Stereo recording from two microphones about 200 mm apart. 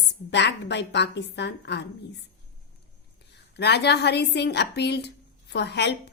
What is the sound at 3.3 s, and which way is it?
A woman's voice, 55° left (ahead or behind).